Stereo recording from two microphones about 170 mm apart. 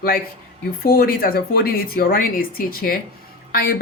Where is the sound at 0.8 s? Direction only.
60° left (ahead or behind).